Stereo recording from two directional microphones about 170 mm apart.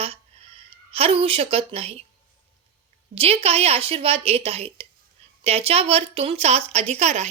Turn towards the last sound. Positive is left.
turn(degrees=-40)  # may be behind; listen again after turning